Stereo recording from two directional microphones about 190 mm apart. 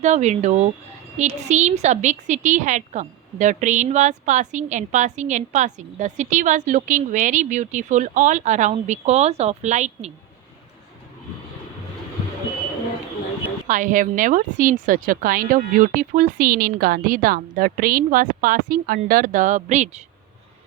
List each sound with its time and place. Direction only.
0.0 s a woman's voice: 35° right (ahead or behind)
13.7 s a woman's voice: 45° right (ahead or behind)